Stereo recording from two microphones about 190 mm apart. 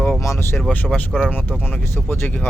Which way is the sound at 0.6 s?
Centre (ahead or behind).